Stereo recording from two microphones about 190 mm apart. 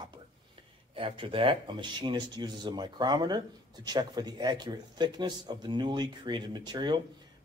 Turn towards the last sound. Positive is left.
turn(degrees=-25)  # may be behind; listen again after turning